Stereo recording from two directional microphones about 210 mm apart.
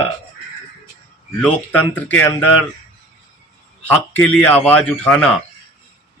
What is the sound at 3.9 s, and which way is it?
A man's voice, 10° left (ahead or behind).